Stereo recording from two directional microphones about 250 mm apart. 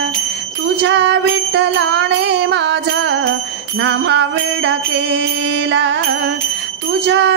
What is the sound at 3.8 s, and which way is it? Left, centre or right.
Jingle bell, right.